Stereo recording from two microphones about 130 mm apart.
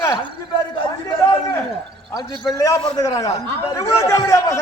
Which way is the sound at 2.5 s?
25° left (ahead or behind).